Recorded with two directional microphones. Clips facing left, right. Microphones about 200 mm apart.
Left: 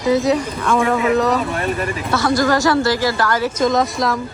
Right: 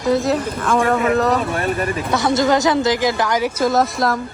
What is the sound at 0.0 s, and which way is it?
Speech, centre (ahead or behind).